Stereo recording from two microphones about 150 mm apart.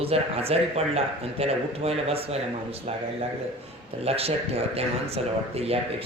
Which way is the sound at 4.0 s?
40° right (ahead or behind).